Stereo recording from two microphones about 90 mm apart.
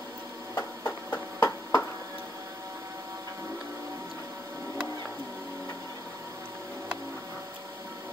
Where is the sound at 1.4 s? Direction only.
40° left (ahead or behind).